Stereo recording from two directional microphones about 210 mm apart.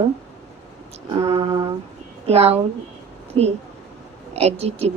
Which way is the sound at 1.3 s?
30° right (ahead or behind).